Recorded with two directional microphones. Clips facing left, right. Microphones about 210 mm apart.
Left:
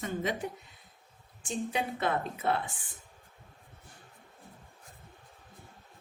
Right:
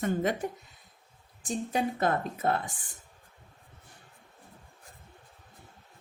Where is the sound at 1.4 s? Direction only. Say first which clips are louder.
Right 3 dB; 40° right (ahead or behind).